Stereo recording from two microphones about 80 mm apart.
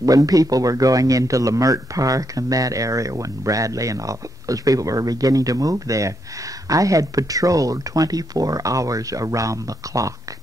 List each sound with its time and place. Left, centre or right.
0.0 s speech: right